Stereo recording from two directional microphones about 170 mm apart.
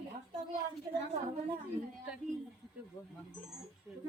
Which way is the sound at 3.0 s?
15° left (ahead or behind).